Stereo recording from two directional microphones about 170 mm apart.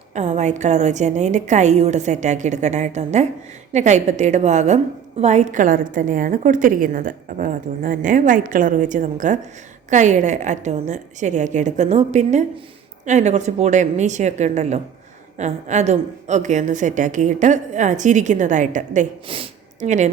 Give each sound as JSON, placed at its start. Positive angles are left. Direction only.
{"t": 0.1, "sound": "a woman's voice", "side_deg": -45}
{"t": 19.3, "sound": "speech", "side_deg": -30}
{"t": 19.8, "sound": "a woman's voice", "side_deg": -45}